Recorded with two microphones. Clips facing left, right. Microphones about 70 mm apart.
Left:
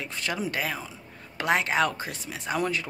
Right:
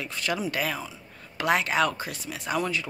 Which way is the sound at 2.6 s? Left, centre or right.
Left.